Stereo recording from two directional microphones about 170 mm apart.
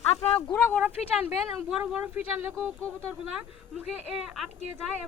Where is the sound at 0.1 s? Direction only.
35° left (ahead or behind).